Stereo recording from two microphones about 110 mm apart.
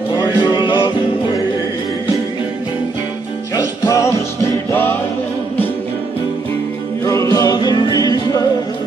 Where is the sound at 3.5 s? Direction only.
25° left (ahead or behind).